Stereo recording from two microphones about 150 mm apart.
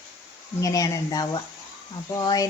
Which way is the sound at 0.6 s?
25° left (ahead or behind).